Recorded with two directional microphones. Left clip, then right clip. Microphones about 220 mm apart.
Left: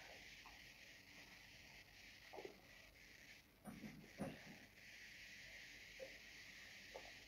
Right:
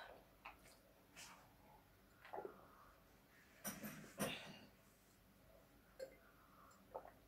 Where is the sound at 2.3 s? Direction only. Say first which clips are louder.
Right 5 dB; 20° right (ahead or behind).